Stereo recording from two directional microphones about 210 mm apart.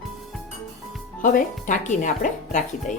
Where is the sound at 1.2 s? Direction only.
40° left (ahead or behind).